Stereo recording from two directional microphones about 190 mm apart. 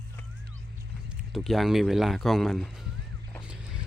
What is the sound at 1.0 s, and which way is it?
Speech, centre (ahead or behind).